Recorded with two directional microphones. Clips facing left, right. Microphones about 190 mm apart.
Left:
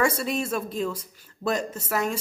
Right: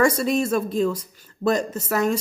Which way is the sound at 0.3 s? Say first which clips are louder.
Right 6 dB; 5° left (ahead or behind).